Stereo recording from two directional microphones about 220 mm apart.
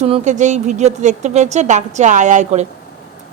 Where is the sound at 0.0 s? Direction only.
30° right (ahead or behind).